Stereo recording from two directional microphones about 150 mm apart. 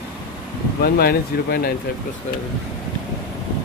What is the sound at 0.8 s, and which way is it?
Speech, 90° left.